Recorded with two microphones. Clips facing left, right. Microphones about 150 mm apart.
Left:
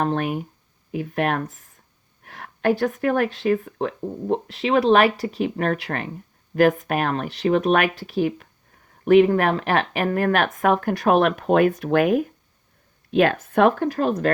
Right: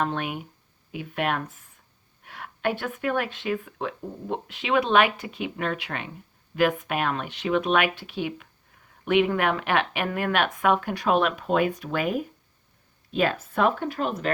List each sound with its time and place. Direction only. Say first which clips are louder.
0.0 s speech: left 5 dB; 40° left (ahead or behind); by 13.7 s 60° left (ahead or behind)
13.7 s speech: left 6 dB; 40° left (ahead or behind)